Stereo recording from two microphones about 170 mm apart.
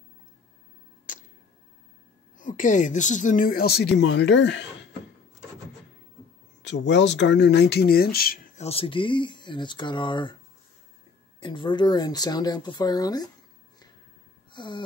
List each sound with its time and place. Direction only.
1.1 s camera: 50° left (ahead or behind)
2.3 s speech: 50° left (ahead or behind); by 4.6 s 90° left
6.6 s speech: 90° left; by 8.4 s 65° left (ahead or behind)
8.5 s speech: 35° left (ahead or behind)
11.3 s speech: 30° left (ahead or behind)
14.5 s a sound: 30° left (ahead or behind)